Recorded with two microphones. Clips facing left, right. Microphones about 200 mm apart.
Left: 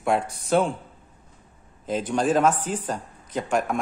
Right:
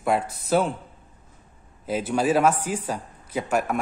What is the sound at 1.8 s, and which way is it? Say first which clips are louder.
A man's voice: even; 5° right (ahead or behind).